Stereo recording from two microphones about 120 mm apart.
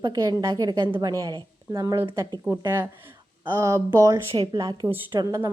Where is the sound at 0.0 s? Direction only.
30° right (ahead or behind).